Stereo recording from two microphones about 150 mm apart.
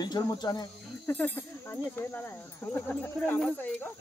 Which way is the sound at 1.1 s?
10° left (ahead or behind).